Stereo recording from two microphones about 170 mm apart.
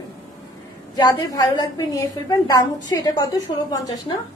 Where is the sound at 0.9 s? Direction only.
25° left (ahead or behind).